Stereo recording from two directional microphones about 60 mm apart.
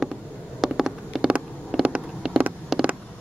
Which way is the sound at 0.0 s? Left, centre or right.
Centre.